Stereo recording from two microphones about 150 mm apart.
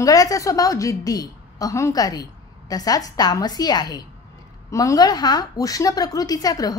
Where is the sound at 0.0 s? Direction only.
25° left (ahead or behind).